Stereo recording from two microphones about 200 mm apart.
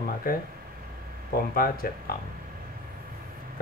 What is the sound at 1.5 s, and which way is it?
Speech, 45° left (ahead or behind).